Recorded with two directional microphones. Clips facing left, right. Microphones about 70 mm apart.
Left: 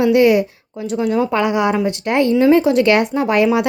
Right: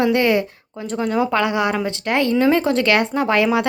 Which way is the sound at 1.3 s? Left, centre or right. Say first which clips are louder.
Left 3 dB; left.